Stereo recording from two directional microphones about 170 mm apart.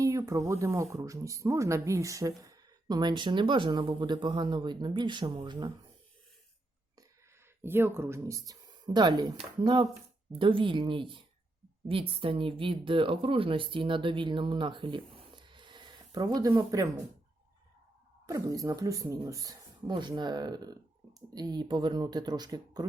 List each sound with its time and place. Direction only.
0.0 s speech: 20° right (ahead or behind)
7.6 s speech: 15° right (ahead or behind)
10.3 s speech: 30° right (ahead or behind)
18.3 s speech: 20° right (ahead or behind)